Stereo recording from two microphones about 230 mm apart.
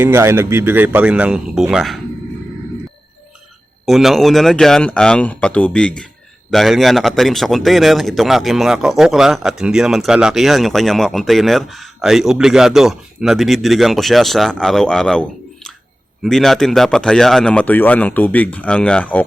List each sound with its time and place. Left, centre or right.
0.0 s speech: centre
3.8 s a man's voice: centre